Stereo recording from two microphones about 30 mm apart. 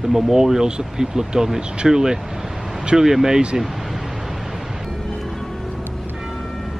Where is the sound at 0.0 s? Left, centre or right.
Centre.